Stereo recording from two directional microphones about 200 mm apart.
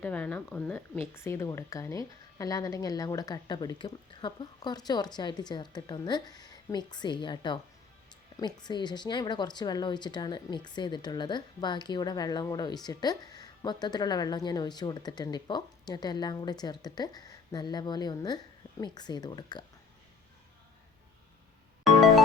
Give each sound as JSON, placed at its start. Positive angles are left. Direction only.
{"t": 0.0, "sound": "a woman's voice", "side_deg": 5}
{"t": 21.8, "sound": "music", "side_deg": 0}